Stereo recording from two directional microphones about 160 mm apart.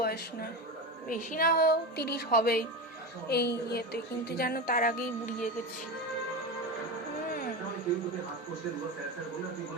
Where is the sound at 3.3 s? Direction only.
90° left; by 5.0 s 60° left (ahead or behind).